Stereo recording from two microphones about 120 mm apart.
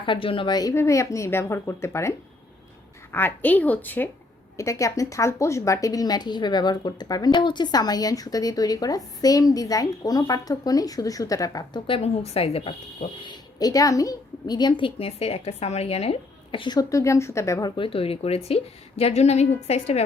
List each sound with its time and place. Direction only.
0.0 s a woman's voice: 45° left (ahead or behind)
0.7 s a woman's voice: 25° left (ahead or behind)
11.9 s a woman's voice: 55° left (ahead or behind)
16.9 s speech: 25° left (ahead or behind)
17.7 s a woman's voice: 50° left (ahead or behind)